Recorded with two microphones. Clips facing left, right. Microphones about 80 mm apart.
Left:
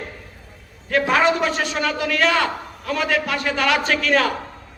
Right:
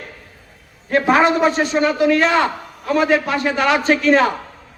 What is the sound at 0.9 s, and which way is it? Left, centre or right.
A man's voice, right.